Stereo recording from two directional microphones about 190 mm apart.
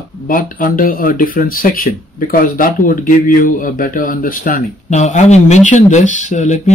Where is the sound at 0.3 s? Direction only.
45° left (ahead or behind).